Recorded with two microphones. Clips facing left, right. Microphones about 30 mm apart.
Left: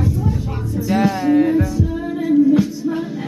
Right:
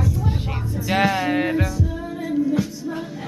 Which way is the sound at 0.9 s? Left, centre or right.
Right.